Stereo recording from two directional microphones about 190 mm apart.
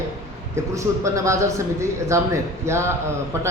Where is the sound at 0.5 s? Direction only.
15° right (ahead or behind).